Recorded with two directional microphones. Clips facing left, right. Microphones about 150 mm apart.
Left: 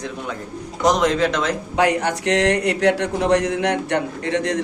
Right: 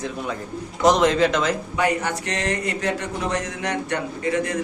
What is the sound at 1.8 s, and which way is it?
Speech, 75° left (ahead or behind).